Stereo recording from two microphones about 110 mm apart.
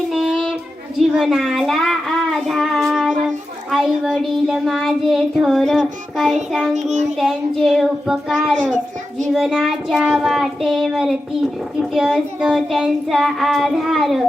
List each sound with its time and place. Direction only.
0.1 s child singing: centre (ahead or behind)
1.1 s speech: 5° right (ahead or behind)
4.2 s child singing: centre (ahead or behind)